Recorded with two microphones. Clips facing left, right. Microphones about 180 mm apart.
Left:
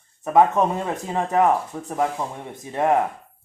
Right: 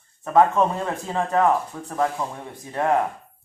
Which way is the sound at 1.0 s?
15° left (ahead or behind).